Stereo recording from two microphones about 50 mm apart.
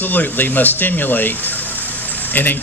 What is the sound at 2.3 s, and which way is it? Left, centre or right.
Speech, left.